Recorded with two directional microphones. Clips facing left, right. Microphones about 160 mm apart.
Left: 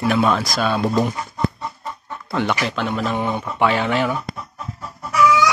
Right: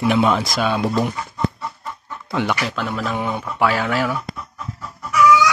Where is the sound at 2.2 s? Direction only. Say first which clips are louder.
Even; 10° right (ahead or behind).